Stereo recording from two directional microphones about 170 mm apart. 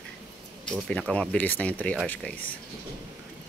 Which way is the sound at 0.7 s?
5° left (ahead or behind).